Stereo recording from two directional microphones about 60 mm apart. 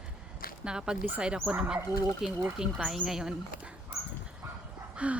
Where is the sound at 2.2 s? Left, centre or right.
Centre.